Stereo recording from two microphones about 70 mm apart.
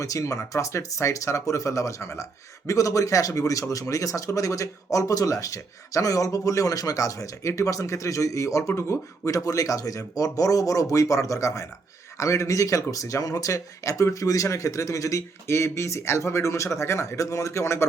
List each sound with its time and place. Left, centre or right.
0.0 s speech: left
2.6 s speech: left